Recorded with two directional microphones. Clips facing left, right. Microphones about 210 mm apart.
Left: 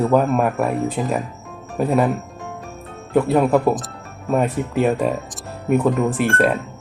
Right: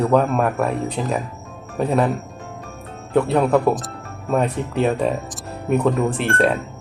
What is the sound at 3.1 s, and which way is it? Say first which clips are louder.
Speech: left 1 dB; centre (ahead or behind).